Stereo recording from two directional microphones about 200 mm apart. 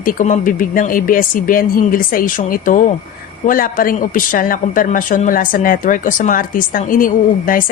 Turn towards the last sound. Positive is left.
turn(degrees=45)  # may be behind; listen again after turning